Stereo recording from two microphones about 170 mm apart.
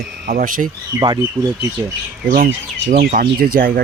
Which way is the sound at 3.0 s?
60° right (ahead or behind).